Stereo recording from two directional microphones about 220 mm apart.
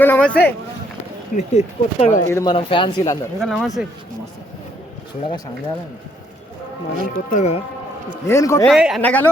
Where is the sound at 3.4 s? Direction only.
Centre (ahead or behind).